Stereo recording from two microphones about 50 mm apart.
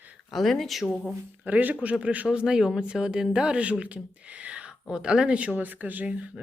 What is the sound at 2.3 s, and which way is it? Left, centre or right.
A woman's voice, centre.